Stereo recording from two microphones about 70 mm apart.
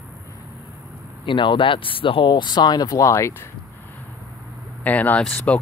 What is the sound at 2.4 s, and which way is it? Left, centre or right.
Speech, left.